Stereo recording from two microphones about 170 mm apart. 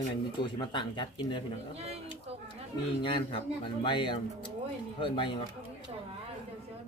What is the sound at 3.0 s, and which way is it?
Speech, 30° left (ahead or behind).